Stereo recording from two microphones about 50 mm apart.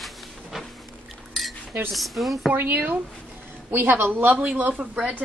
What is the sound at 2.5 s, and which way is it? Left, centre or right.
A woman's voice, right.